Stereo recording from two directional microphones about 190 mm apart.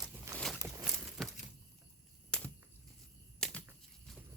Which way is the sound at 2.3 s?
5° left (ahead or behind).